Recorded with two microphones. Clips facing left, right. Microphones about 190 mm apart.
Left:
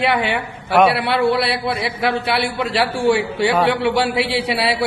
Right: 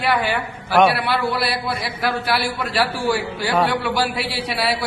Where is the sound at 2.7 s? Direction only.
25° left (ahead or behind).